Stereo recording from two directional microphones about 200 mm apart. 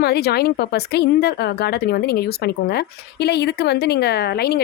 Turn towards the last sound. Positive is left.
turn(degrees=50)  # may be behind; listen again after turning